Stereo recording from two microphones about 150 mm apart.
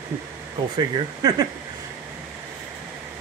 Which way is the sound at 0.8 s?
25° right (ahead or behind).